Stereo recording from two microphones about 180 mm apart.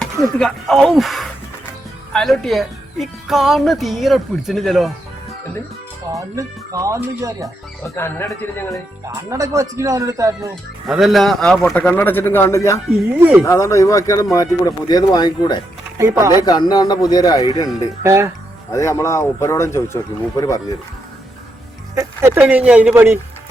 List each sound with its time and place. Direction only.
0.0 s speech: 5° left (ahead or behind)
6.1 s speech: 20° right (ahead or behind)
7.9 s speech: 15° left (ahead or behind)
9.0 s speech: 15° right (ahead or behind)
10.5 s speech: centre (ahead or behind); by 12.8 s 15° left (ahead or behind)
13.1 s speech: 10° right (ahead or behind)
13.4 s speech: 15° left (ahead or behind)
16.0 s speech: 15° right (ahead or behind)
16.4 s speech: 20° left (ahead or behind)
18.0 s speech: 15° right (ahead or behind)
18.7 s speech: 15° left (ahead or behind)
21.9 s speech: 15° right (ahead or behind)